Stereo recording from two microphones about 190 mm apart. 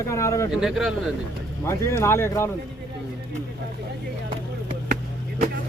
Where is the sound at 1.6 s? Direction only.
15° left (ahead or behind).